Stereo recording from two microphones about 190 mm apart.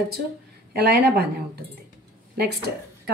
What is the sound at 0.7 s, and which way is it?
Speech, 55° right (ahead or behind).